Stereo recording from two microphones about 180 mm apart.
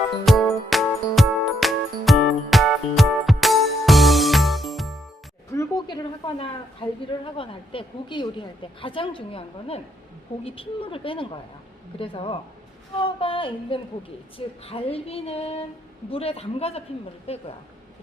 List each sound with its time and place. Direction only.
0.3 s music: centre (ahead or behind)
5.5 s a sound: 20° left (ahead or behind)
7.3 s a woman's voice: 30° left (ahead or behind)
11.9 s female singing: 30° left (ahead or behind)
13.0 s a woman's voice: 30° left (ahead or behind)
14.3 s female singing: 30° left (ahead or behind)